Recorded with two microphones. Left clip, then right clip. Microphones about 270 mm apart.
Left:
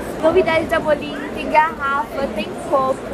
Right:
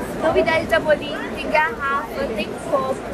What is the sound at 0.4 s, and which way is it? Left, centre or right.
Speech, left.